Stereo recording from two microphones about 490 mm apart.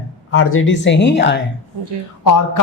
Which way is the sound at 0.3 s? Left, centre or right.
Left.